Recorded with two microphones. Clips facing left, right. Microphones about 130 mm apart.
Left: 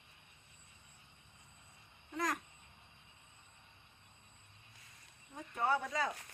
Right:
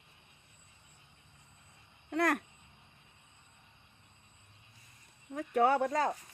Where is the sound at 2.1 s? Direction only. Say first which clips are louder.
Right 8 dB; 65° right (ahead or behind).